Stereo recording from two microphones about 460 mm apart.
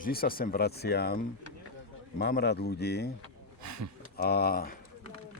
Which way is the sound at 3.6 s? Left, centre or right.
Right.